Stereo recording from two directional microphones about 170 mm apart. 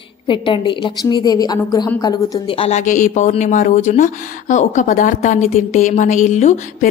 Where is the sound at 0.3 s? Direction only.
30° left (ahead or behind).